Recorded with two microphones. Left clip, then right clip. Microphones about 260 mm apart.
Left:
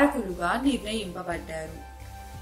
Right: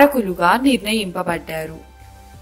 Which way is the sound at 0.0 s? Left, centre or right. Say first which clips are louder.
Right 11 dB; right.